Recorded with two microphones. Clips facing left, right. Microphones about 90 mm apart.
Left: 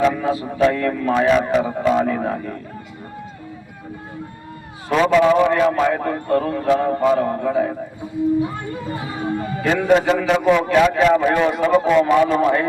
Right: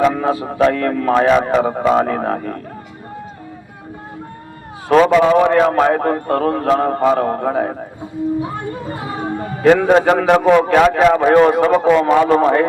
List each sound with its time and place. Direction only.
0.0 s a man's voice: 55° right (ahead or behind)
4.9 s a man's voice: 55° right (ahead or behind)
9.6 s a man's voice: 60° right (ahead or behind)
12.4 s a man's voice: 45° right (ahead or behind)